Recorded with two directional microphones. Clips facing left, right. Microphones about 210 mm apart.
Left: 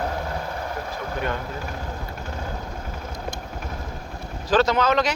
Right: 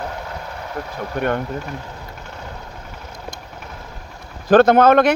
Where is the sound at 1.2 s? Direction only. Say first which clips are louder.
Right 7 dB; 60° right (ahead or behind).